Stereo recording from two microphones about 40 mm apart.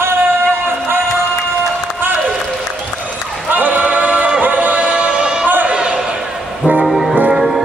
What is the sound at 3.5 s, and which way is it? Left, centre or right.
Singing, right.